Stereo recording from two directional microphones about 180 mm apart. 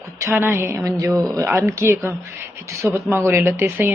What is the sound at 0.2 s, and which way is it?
Speech, 15° right (ahead or behind).